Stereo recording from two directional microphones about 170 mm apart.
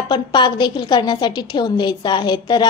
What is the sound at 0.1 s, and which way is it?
A woman's voice, 25° left (ahead or behind).